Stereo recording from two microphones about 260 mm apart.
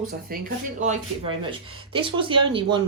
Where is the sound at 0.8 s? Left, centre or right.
Right.